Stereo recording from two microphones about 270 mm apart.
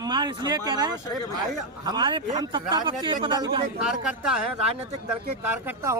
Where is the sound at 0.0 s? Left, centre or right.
Centre.